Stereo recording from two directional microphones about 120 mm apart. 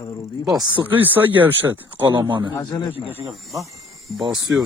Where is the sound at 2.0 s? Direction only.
35° right (ahead or behind).